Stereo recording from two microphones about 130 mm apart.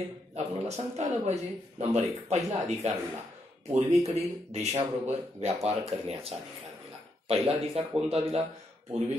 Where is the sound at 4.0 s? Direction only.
55° right (ahead or behind).